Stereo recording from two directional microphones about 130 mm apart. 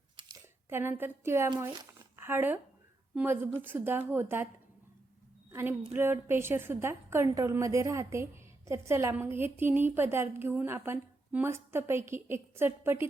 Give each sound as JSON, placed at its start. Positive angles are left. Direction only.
{"t": 0.3, "sound": "a woman's voice", "side_deg": -20}
{"t": 5.5, "sound": "a woman's voice", "side_deg": -15}